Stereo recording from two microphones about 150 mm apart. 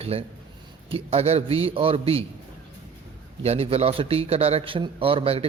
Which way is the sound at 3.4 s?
40° right (ahead or behind).